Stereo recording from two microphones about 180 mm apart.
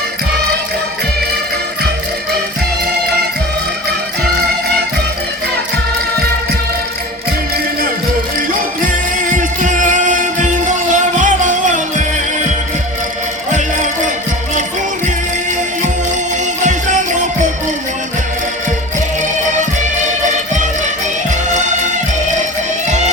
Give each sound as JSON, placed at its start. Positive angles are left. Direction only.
{"t": 8.4, "sound": "music", "side_deg": -50}
{"t": 21.2, "sound": "music", "side_deg": -40}